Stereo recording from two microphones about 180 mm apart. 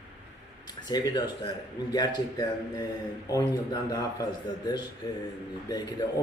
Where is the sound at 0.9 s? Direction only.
25° left (ahead or behind).